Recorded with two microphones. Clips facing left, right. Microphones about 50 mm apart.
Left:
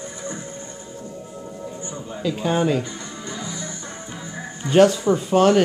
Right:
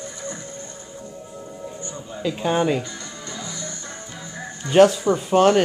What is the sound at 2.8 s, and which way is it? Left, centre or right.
Music, centre.